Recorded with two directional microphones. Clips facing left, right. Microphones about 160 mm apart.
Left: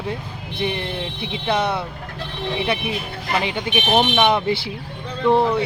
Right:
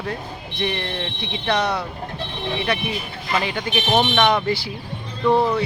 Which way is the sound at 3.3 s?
20° left (ahead or behind).